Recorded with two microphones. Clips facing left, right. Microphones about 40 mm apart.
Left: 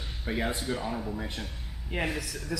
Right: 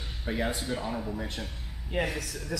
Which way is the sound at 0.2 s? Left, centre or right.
Centre.